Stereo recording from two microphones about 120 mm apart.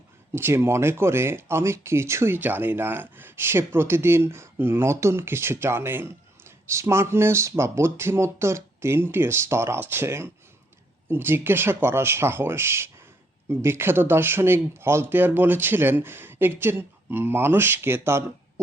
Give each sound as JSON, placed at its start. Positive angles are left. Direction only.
{"t": 0.3, "sound": "speech", "side_deg": -20}